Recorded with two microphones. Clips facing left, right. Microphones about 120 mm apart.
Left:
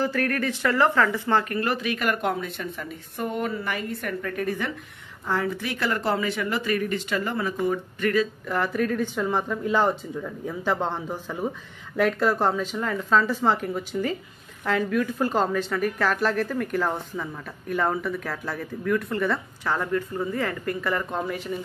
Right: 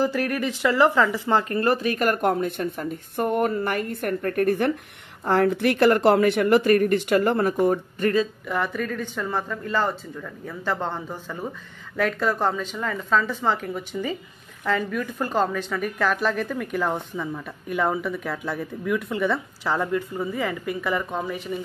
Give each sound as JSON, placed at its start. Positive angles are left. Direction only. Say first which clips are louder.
{"t": 0.0, "sound": "speech", "louder": "right 1 dB", "side_deg": -15}
{"t": 1.4, "sound": "a woman's voice", "louder": "right 4 dB", "side_deg": -30}
{"t": 8.0, "sound": "speech", "louder": "right 1 dB", "side_deg": -25}
{"t": 8.5, "sound": "speech", "louder": "left 2 dB", "side_deg": 0}
{"t": 19.6, "sound": "speech", "louder": "right 1 dB", "side_deg": -15}